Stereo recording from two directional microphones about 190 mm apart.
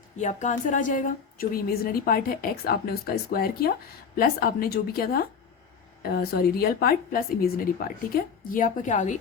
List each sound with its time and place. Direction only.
0.2 s a woman's voice: 40° left (ahead or behind)